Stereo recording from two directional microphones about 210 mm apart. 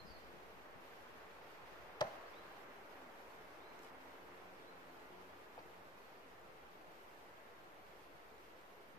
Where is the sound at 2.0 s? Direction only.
20° left (ahead or behind).